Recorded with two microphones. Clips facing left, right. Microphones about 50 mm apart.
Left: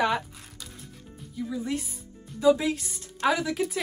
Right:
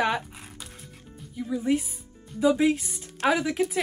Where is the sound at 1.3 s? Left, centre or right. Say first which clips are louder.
Right 5 dB; right.